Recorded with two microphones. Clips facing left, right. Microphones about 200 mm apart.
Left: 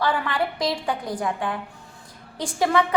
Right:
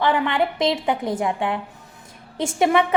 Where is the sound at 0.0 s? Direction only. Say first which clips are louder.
Right 4 dB; 20° right (ahead or behind).